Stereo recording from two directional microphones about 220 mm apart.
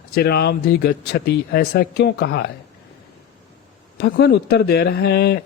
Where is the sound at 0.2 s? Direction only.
50° left (ahead or behind).